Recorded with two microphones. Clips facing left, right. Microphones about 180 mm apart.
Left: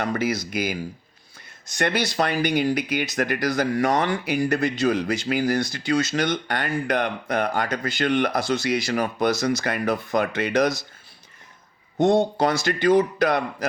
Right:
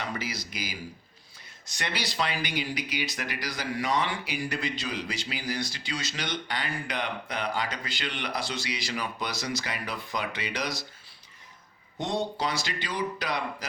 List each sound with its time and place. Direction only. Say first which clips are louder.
0.0 s speech: left 10 dB; 55° left (ahead or behind)
11.9 s speech: left 11 dB; 50° left (ahead or behind)